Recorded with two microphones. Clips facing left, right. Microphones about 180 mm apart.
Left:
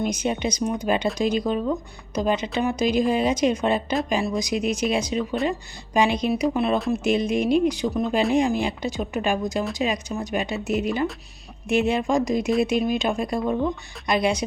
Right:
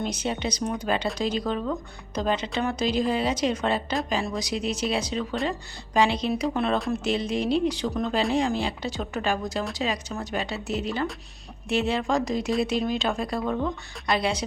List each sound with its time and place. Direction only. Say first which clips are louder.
0.0 s speech: left 4 dB; 15° left (ahead or behind)
7.0 s speech: left 4 dB; 15° left (ahead or behind)